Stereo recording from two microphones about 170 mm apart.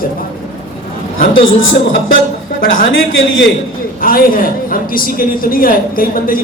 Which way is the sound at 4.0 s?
55° left (ahead or behind).